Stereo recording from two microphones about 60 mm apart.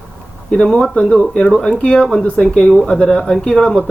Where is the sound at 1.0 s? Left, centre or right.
Centre.